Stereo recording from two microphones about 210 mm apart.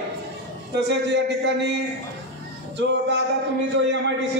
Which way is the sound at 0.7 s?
55° right (ahead or behind).